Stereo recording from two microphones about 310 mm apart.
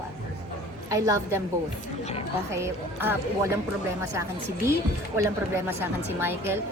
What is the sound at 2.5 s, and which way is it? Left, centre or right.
A woman's voice, centre.